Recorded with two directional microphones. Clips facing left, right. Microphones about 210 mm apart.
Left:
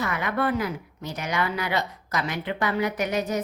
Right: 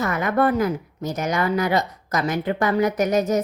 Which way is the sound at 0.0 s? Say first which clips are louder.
Right 6 dB; 45° right (ahead or behind).